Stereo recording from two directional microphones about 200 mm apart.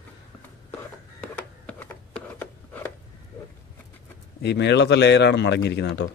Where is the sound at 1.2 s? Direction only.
5° left (ahead or behind).